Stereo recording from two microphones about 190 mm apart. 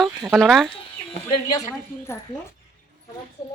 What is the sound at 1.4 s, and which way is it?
Speech, 20° left (ahead or behind).